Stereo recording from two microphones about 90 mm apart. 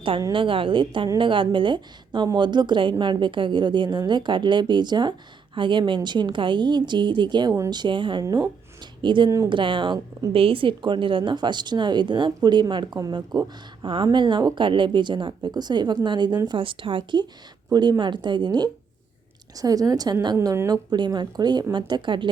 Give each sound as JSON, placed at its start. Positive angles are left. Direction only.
{"t": 0.3, "sound": "a woman's voice", "side_deg": -75}
{"t": 8.2, "sound": "a woman's voice", "side_deg": -45}
{"t": 9.0, "sound": "a woman's voice", "side_deg": -60}
{"t": 13.8, "sound": "a woman's voice", "side_deg": -60}
{"t": 16.5, "sound": "a woman's voice", "side_deg": -75}
{"t": 17.7, "sound": "a woman's voice", "side_deg": -50}
{"t": 19.5, "sound": "a woman's voice", "side_deg": -40}
{"t": 20.7, "sound": "a woman's voice", "side_deg": -50}